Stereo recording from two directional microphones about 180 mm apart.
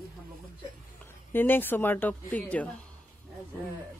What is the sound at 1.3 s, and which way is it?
Speech, 10° left (ahead or behind).